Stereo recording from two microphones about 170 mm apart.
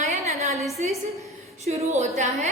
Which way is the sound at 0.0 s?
40° right (ahead or behind).